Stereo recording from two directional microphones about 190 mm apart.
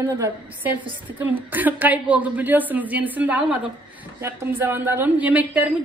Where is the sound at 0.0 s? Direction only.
20° right (ahead or behind).